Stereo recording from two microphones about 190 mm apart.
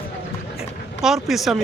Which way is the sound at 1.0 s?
Centre (ahead or behind).